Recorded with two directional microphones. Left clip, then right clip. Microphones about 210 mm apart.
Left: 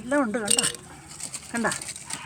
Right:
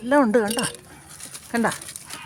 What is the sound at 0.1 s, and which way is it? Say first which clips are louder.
Speech: right 7 dB; 50° right (ahead or behind).